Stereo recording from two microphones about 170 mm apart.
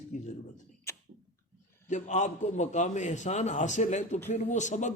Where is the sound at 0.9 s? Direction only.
15° left (ahead or behind).